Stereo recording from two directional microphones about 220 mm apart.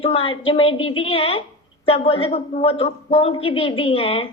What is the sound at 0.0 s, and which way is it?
A woman's voice, 25° left (ahead or behind).